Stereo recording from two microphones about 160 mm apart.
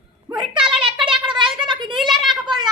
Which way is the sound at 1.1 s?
30° right (ahead or behind).